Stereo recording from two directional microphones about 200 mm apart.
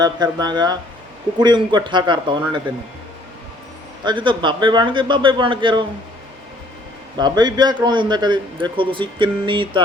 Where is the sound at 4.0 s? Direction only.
25° right (ahead or behind).